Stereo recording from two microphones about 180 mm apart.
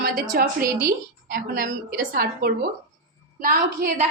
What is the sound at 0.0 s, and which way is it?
A woman's voice, 55° right (ahead or behind).